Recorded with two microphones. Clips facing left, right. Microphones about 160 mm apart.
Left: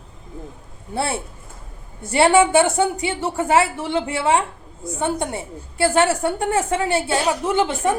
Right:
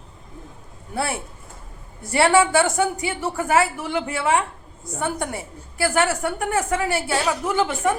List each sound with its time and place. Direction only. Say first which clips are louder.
0.9 s a woman's voice: left 2 dB; 25° left (ahead or behind)